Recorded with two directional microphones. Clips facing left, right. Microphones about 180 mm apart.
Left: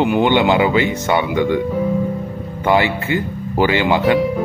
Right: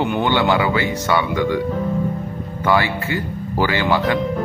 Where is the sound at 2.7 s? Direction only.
20° left (ahead or behind).